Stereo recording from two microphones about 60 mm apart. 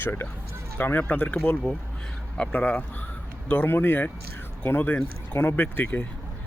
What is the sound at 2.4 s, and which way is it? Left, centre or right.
Speech, left.